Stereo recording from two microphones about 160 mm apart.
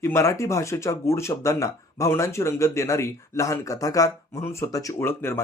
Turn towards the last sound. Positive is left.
turn(degrees=15)  # may be behind; listen again after turning